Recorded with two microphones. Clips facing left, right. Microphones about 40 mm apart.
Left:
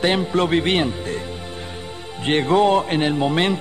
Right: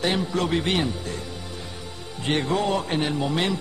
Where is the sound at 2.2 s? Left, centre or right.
Left.